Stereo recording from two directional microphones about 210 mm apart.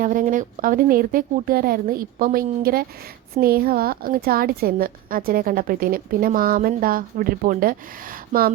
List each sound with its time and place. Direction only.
0.0 s a woman's voice: 40° right (ahead or behind)